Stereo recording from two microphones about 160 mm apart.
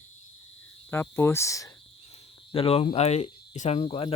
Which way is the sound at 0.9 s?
15° left (ahead or behind).